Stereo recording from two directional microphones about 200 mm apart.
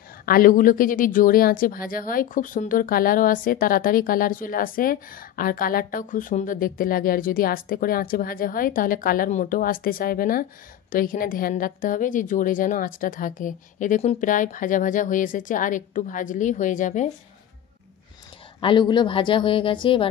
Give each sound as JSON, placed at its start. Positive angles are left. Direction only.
{"t": 0.2, "sound": "a woman's voice", "side_deg": 45}
{"t": 18.6, "sound": "a woman's voice", "side_deg": 25}